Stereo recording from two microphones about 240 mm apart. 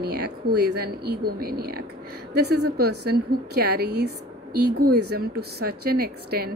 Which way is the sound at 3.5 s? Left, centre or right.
Right.